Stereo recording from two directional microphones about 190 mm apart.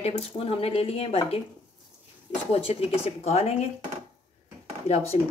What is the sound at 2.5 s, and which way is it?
Speech, 30° left (ahead or behind).